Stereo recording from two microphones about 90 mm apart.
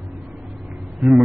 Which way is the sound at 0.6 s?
Centre (ahead or behind).